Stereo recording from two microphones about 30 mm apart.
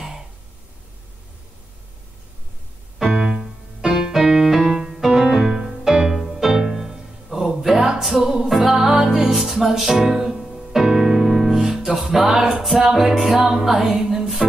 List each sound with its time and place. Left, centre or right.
3.1 s music: centre
4.9 s music: centre
7.3 s a sound: centre
8.0 s music: centre
12.8 s music: centre